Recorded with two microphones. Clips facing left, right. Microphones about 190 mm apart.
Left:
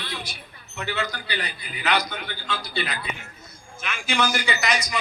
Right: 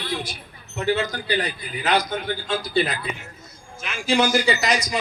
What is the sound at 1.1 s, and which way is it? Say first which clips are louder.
A man's voice: right 7 dB; 45° right (ahead or behind).